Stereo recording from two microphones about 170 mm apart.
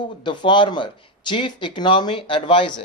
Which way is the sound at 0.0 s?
25° left (ahead or behind).